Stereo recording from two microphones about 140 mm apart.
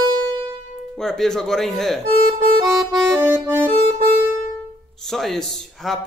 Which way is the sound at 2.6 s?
25° right (ahead or behind).